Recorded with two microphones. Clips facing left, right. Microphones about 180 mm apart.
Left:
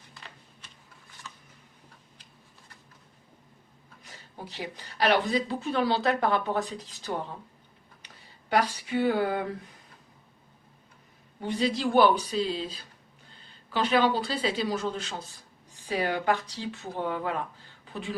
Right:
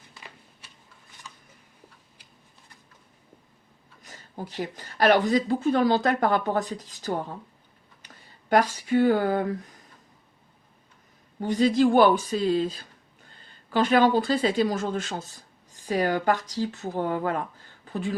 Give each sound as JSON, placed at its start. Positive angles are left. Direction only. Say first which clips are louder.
{"t": 4.4, "sound": "speech", "louder": "right 5 dB", "side_deg": -45}
{"t": 11.4, "sound": "speech", "louder": "right 7 dB", "side_deg": -45}